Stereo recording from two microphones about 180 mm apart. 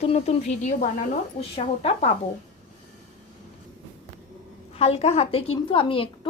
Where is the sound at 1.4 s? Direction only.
35° left (ahead or behind).